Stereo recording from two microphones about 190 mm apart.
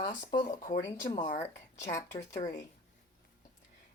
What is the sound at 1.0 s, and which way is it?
Speech, 30° left (ahead or behind).